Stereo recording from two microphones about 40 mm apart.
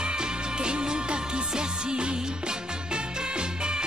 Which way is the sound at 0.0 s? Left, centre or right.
Right.